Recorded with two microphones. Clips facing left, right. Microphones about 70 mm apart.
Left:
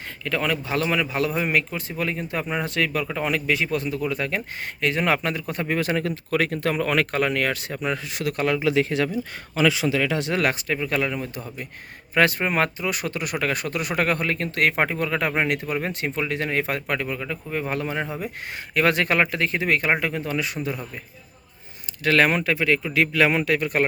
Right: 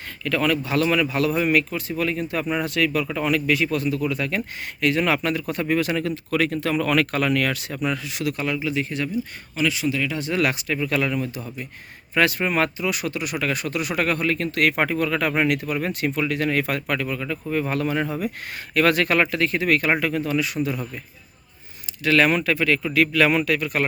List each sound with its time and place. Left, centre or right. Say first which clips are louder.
0.3 s a man's voice: right 3 dB; left
8.6 s speech: left 4 dB; left
10.0 s speech: left 2 dB; left
10.3 s speech: right 4 dB; left
10.8 s a man's voice: right 2 dB; left
22.0 s speech: right 1 dB; left
22.4 s a man's voice: right 1 dB; centre; by 23.8 s left